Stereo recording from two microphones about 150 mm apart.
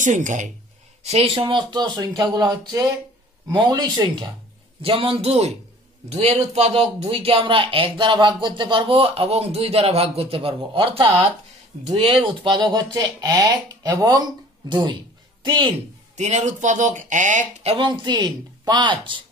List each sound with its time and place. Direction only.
0.0 s speech: 55° right (ahead or behind)
1.0 s speech: 40° right (ahead or behind)
16.2 s speech: 50° right (ahead or behind)
17.7 s speech: 30° right (ahead or behind)